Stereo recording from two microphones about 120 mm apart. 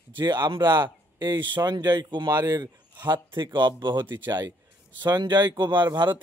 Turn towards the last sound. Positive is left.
turn(degrees=-40)  # may be behind; listen again after turning